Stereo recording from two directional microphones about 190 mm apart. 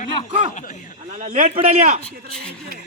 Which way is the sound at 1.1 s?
40° right (ahead or behind).